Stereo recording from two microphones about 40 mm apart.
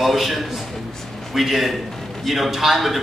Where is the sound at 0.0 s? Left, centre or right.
Centre.